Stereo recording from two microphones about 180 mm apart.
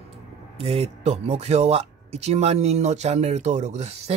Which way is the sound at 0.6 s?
35° right (ahead or behind).